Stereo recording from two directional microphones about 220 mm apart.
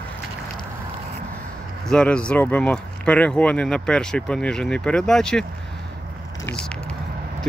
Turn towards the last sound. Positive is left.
turn(degrees=5)  # may be behind; listen again after turning